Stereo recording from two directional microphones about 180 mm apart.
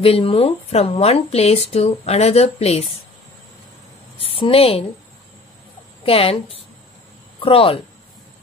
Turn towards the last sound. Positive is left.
turn(degrees=30)  # may be behind; listen again after turning